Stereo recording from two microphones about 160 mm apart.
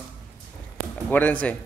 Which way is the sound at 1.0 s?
10° left (ahead or behind).